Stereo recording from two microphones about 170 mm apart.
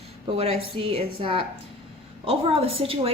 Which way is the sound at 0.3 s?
35° right (ahead or behind).